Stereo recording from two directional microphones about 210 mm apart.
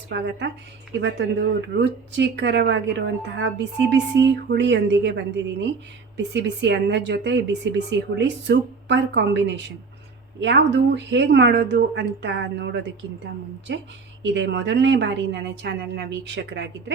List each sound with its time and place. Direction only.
0.1 s a woman's voice: 55° right (ahead or behind)